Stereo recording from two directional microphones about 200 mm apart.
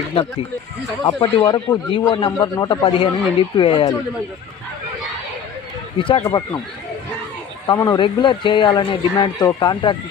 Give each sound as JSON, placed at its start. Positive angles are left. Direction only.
{"t": 0.1, "sound": "a man's voice", "side_deg": 25}
{"t": 6.0, "sound": "a man's voice", "side_deg": 25}
{"t": 7.7, "sound": "a man's voice", "side_deg": 20}